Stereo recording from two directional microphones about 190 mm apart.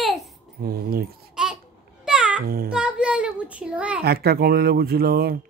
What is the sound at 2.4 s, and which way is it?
Speech, 50° right (ahead or behind).